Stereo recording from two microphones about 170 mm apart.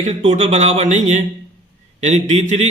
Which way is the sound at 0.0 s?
40° right (ahead or behind).